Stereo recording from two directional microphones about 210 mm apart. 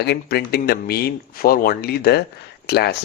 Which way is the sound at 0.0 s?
50° left (ahead or behind).